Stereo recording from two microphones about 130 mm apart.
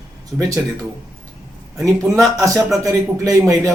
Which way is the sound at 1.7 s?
25° right (ahead or behind).